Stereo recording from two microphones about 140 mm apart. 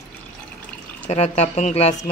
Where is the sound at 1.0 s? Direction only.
50° left (ahead or behind).